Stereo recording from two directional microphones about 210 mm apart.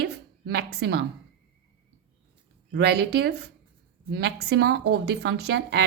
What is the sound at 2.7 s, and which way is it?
A woman's voice, 50° right (ahead or behind).